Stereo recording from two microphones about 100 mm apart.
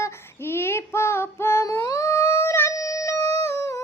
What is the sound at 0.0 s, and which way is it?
Child singing, 25° left (ahead or behind).